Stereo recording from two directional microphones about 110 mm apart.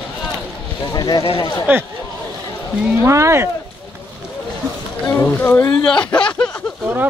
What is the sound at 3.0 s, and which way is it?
Speech, 25° right (ahead or behind).